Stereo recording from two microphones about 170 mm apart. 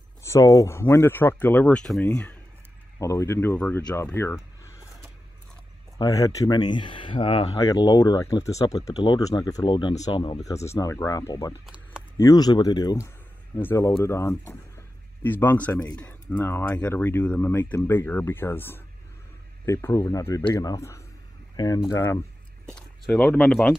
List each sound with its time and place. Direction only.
0.2 s speech: 20° left (ahead or behind)
5.9 s speech: 20° left (ahead or behind)
7.5 s speech: 20° left (ahead or behind)
10.5 s speech: 20° left (ahead or behind)
11.6 s a sound: 5° right (ahead or behind)
12.2 s speech: 20° left (ahead or behind)
22.8 s speech: 5° left (ahead or behind)